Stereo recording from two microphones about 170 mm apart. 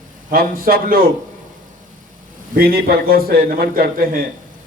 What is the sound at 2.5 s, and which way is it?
A man's voice, 65° right (ahead or behind).